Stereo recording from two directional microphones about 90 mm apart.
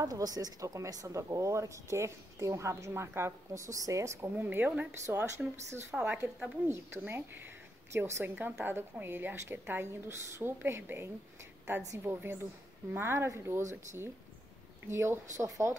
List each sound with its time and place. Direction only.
0.0 s a woman's voice: 45° right (ahead or behind)